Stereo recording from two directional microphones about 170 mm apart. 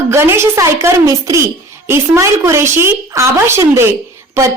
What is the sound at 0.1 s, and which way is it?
A woman's voice, 15° right (ahead or behind).